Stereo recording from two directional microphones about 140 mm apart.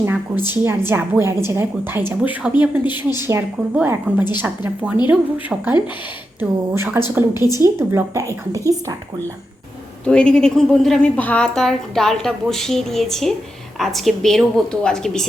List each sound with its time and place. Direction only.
0.0 s a woman's voice: 15° right (ahead or behind)
7.3 s a woman's voice: 25° left (ahead or behind)
7.6 s a woman's voice: 20° right (ahead or behind)
10.1 s a woman's voice: 5° left (ahead or behind)